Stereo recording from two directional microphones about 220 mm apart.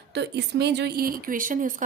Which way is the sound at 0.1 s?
50° right (ahead or behind).